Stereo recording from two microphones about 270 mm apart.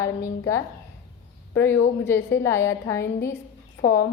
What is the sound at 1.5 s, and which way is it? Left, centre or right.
A woman's voice, centre.